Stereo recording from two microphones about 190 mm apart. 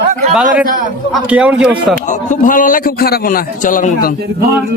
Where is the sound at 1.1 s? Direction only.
5° right (ahead or behind).